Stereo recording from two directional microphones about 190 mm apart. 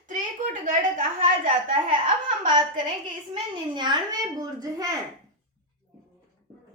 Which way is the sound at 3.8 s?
20° right (ahead or behind).